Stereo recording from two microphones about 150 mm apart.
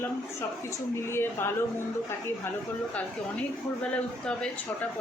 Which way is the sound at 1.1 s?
15° left (ahead or behind).